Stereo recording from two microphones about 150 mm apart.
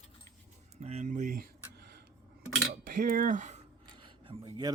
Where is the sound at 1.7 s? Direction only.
90° right.